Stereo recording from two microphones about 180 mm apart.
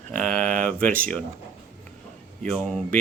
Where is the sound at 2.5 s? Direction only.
5° left (ahead or behind).